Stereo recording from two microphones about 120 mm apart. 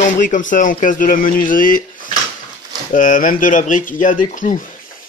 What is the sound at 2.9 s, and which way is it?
Speech, 90° left.